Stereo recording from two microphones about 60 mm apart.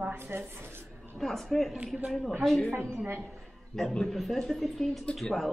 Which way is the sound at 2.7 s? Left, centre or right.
Right.